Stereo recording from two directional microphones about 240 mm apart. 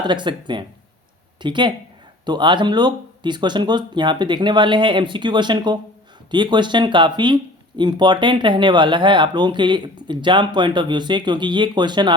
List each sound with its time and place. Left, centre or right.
0.0 s speech: centre